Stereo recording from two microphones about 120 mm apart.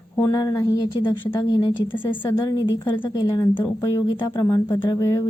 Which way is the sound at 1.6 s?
45° left (ahead or behind).